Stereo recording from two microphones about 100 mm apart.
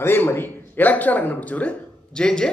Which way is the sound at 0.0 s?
25° left (ahead or behind).